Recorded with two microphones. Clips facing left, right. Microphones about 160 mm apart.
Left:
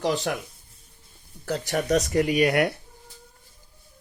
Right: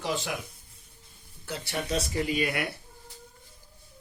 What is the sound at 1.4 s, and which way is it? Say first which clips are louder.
Speech: left 8 dB; 65° left (ahead or behind).